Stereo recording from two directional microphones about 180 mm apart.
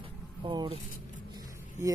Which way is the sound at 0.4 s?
25° right (ahead or behind).